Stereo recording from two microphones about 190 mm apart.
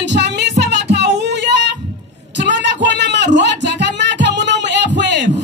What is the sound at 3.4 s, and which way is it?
Music, 65° right (ahead or behind).